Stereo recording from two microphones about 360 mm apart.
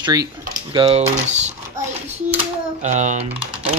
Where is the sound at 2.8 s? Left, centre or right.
Centre.